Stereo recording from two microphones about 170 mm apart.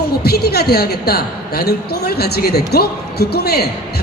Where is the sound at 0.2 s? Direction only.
65° left (ahead or behind).